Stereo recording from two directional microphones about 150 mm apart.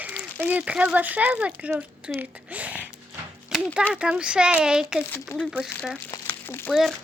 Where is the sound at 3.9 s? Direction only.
5° right (ahead or behind).